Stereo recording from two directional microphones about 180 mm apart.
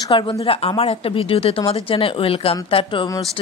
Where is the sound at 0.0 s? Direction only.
25° left (ahead or behind).